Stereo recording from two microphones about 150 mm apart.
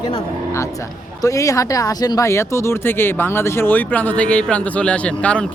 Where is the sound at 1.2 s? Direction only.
20° left (ahead or behind).